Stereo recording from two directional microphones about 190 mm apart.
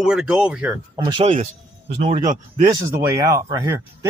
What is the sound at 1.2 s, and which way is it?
Speech, 35° right (ahead or behind).